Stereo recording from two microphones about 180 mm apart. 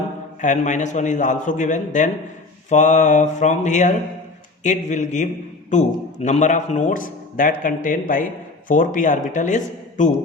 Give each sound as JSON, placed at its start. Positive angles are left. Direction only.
{"t": 0.4, "sound": "a man's voice", "side_deg": 45}